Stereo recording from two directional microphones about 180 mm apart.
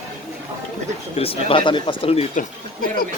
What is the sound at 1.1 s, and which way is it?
Speech, 30° left (ahead or behind).